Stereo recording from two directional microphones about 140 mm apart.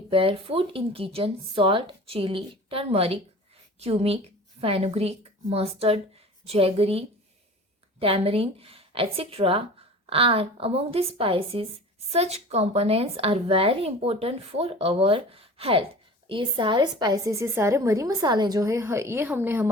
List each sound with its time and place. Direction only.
0.1 s a woman's voice: 40° right (ahead or behind); by 19.7 s 15° right (ahead or behind)